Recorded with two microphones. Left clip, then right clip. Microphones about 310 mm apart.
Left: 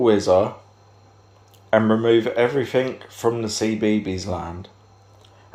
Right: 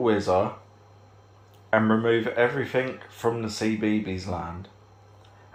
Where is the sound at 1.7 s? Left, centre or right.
Left.